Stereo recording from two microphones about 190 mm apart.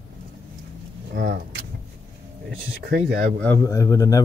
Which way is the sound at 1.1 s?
55° right (ahead or behind).